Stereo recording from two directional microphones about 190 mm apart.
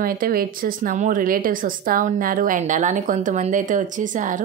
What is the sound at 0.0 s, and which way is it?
A woman's voice, 50° right (ahead or behind).